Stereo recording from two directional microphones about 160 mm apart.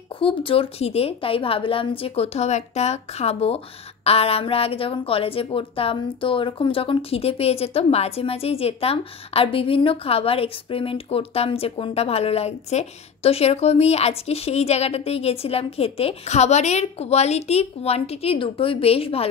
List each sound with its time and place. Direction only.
0.2 s a woman's voice: 35° left (ahead or behind)